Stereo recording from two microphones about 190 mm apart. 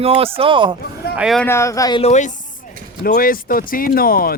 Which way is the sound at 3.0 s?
50° left (ahead or behind).